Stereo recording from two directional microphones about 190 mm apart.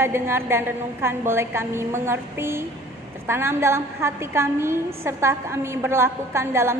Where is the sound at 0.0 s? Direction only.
15° right (ahead or behind).